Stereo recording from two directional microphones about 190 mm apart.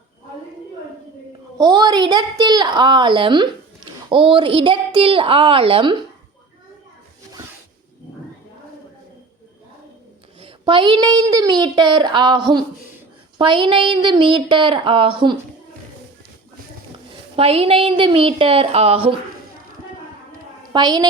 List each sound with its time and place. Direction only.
1.5 s a woman's voice: 20° right (ahead or behind)
10.4 s a woman's voice: 25° right (ahead or behind)
17.3 s a woman's voice: 30° right (ahead or behind)
20.7 s a woman's voice: 20° right (ahead or behind)